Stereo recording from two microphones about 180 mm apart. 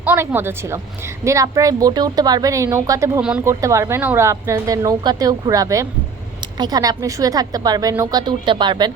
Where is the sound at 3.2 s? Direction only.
5° right (ahead or behind).